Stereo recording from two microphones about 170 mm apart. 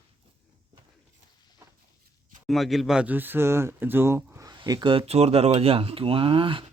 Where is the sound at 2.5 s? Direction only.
Centre (ahead or behind); by 6.7 s 30° right (ahead or behind).